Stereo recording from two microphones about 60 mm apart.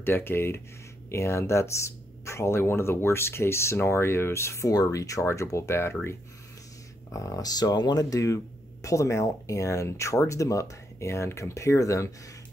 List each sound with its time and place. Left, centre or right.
0.0 s speech: left
4.6 s speech: left
7.1 s speech: left
8.8 s speech: left